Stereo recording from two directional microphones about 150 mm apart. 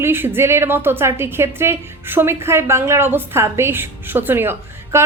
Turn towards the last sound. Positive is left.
turn(degrees=-15)  # may be behind; listen again after turning